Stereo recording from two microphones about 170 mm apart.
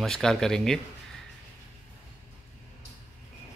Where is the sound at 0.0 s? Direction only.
Centre (ahead or behind).